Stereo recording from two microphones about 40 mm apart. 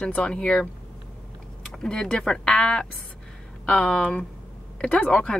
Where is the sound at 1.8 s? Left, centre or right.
Left.